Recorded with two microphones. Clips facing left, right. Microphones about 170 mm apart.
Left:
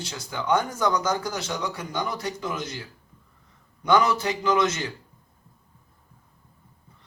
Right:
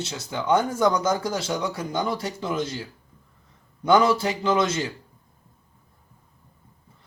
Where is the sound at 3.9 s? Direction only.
30° right (ahead or behind).